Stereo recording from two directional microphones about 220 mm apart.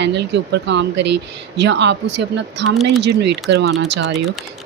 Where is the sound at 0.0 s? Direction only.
50° right (ahead or behind).